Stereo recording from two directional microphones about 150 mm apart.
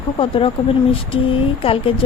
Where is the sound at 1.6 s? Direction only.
35° left (ahead or behind).